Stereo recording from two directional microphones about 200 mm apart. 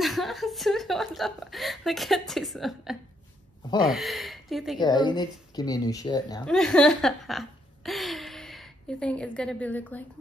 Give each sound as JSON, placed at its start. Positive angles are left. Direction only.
{"t": 0.0, "sound": "a woman's voice", "side_deg": 0}
{"t": 4.7, "sound": "speech", "side_deg": 20}
{"t": 6.4, "sound": "speech", "side_deg": 5}